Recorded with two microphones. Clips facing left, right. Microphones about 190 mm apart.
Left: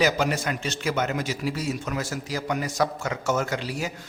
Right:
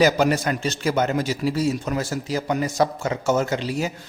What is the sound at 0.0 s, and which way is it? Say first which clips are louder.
A man's voice: right 5 dB; 40° right (ahead or behind).